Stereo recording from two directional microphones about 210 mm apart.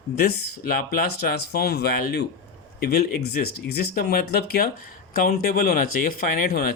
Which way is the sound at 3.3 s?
45° left (ahead or behind).